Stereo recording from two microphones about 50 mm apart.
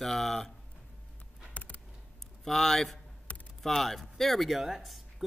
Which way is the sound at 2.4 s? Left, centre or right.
Centre.